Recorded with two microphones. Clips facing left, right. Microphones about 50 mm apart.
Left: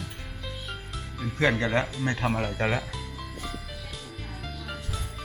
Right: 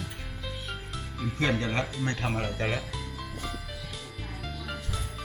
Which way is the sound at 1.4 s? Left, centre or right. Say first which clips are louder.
Left 4 dB; left.